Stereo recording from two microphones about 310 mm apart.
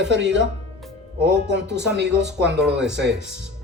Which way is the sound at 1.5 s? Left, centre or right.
Right.